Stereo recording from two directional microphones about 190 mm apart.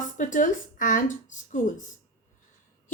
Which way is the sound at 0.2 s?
40° left (ahead or behind).